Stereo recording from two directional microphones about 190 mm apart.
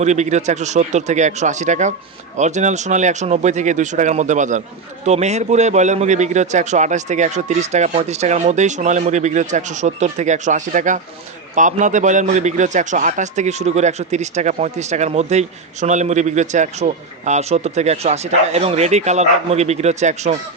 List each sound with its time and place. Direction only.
0.0 s a man's voice: 40° right (ahead or behind)